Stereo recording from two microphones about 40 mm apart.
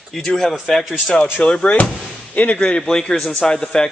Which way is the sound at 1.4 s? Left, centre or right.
Left.